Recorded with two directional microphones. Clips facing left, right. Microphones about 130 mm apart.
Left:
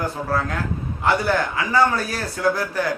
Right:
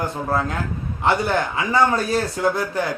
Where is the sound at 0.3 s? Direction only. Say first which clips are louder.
Right 1 dB; 25° right (ahead or behind).